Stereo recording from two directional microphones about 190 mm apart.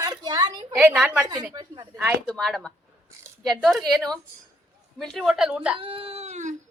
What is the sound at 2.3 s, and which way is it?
A woman's voice, 5° left (ahead or behind).